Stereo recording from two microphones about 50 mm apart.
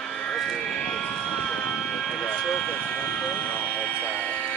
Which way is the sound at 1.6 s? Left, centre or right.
Centre.